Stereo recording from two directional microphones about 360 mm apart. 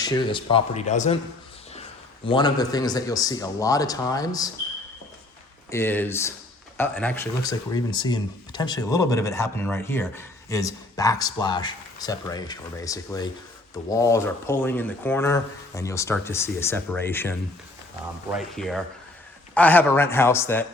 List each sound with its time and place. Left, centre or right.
0.0 s speech: centre
5.7 s speech: centre